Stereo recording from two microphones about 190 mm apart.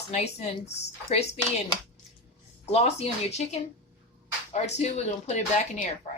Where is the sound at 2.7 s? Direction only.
35° left (ahead or behind).